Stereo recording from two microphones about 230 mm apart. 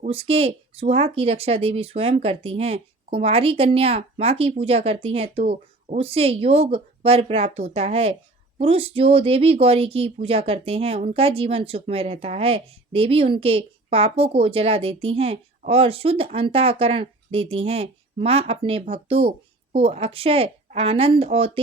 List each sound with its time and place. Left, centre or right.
0.0 s speech: right